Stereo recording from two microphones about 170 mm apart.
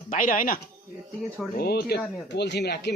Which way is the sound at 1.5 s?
65° left (ahead or behind).